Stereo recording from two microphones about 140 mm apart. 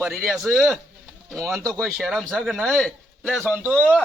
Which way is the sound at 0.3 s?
Centre (ahead or behind).